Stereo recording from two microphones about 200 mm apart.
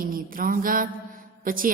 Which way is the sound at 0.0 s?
45° right (ahead or behind).